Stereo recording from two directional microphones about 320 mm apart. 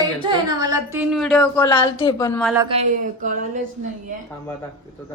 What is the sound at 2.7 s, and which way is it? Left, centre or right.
A woman's voice, right.